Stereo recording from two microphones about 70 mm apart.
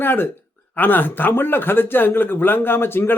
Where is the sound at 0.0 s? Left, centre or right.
Left.